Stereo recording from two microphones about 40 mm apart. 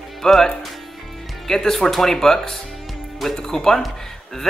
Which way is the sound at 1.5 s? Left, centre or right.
Centre.